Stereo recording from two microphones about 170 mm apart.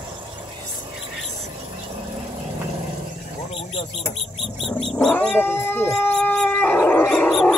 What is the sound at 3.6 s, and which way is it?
Bird, 35° left (ahead or behind).